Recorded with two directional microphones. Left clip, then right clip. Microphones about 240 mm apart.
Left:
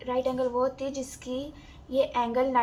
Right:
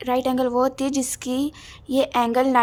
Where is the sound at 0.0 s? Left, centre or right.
Right.